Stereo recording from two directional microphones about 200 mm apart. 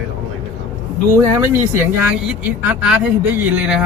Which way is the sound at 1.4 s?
10° right (ahead or behind).